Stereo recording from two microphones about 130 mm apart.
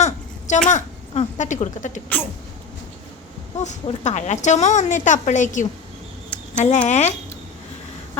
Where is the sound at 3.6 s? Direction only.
65° left (ahead or behind).